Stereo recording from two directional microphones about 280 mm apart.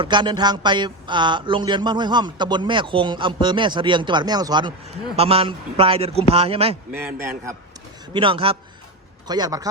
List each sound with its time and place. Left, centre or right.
0.0 s a man's voice: centre
6.9 s a man's voice: centre